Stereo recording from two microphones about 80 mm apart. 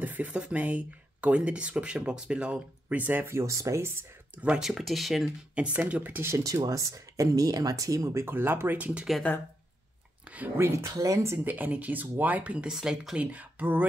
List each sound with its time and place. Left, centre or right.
0.0 s speech: right
3.3 s speech: right
4.4 s speech: centre
4.6 s speech: centre
5.5 s speech: centre
6.3 s speech: right; by 9.0 s centre
10.2 s a sound: centre
10.9 s speech: right
11.3 s speech: right